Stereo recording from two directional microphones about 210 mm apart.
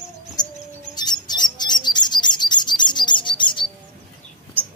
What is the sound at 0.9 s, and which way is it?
Bird, 20° left (ahead or behind).